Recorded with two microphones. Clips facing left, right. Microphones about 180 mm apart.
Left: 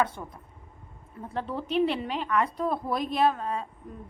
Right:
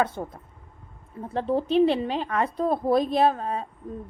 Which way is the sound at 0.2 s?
35° right (ahead or behind).